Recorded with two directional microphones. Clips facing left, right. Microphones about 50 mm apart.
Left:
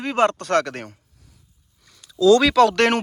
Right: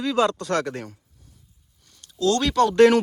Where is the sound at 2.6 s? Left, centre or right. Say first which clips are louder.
Right 1 dB; left.